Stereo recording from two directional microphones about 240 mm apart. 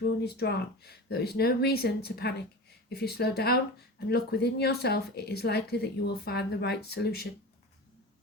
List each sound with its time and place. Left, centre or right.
0.0 s a woman's voice: left